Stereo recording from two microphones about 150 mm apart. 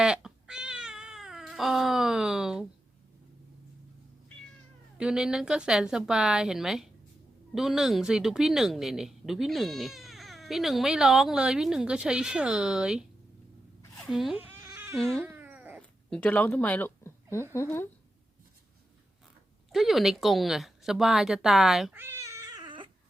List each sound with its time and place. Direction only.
0.0 s cat: 5° right (ahead or behind)
4.9 s speech: 5° right (ahead or behind)
14.4 s a sound: 15° right (ahead or behind)
14.9 s speech: 5° left (ahead or behind)
15.2 s a sound: 15° right (ahead or behind)
16.0 s a woman's voice: 5° left (ahead or behind)
19.7 s speech: centre (ahead or behind)
21.9 s cat: 15° right (ahead or behind); by 22.9 s 30° right (ahead or behind)